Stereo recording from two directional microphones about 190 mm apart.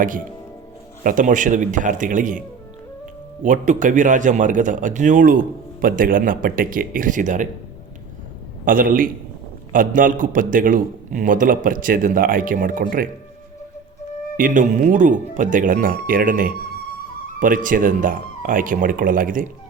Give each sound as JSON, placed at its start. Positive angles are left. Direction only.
{"t": 1.0, "sound": "a man's voice", "side_deg": -45}
{"t": 3.4, "sound": "a man's voice", "side_deg": -40}
{"t": 8.6, "sound": "a man's voice", "side_deg": -45}
{"t": 14.3, "sound": "a man's voice", "side_deg": -45}